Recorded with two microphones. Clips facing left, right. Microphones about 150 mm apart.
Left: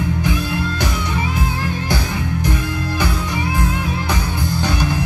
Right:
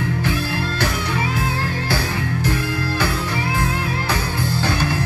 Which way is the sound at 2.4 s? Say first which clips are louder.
Even; 15° left (ahead or behind).